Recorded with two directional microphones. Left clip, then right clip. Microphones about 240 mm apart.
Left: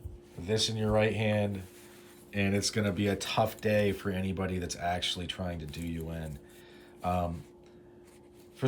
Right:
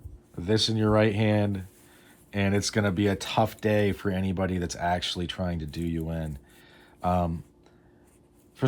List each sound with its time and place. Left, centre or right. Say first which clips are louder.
0.4 s speech: right 5 dB; centre